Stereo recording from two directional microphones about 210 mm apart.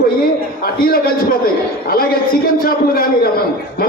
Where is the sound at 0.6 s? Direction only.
45° left (ahead or behind).